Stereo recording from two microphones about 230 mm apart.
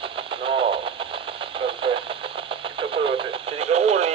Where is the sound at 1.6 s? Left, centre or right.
Right.